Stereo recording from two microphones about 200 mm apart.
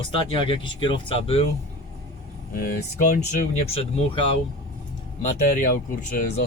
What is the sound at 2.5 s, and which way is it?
Speech, 45° left (ahead or behind).